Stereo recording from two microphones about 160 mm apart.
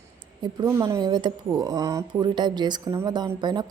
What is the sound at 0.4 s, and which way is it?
Speech, 20° right (ahead or behind).